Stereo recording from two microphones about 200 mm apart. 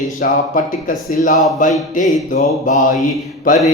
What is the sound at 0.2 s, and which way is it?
Speech, 40° left (ahead or behind).